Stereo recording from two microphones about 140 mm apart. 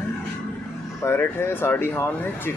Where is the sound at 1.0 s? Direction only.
20° left (ahead or behind).